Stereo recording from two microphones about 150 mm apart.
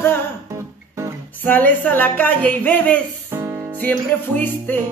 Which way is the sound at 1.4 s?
10° left (ahead or behind).